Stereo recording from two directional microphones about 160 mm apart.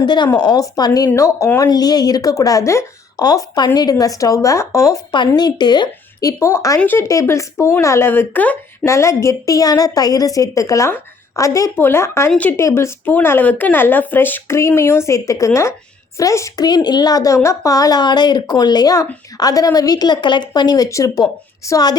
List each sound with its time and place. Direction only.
0.0 s a woman's voice: 30° left (ahead or behind)